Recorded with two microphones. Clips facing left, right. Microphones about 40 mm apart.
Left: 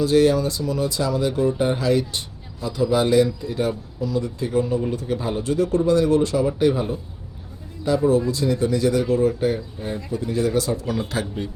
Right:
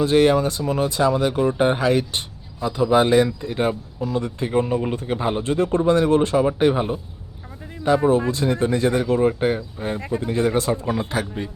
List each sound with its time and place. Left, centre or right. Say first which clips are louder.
0.0 s speech: right 1 dB; right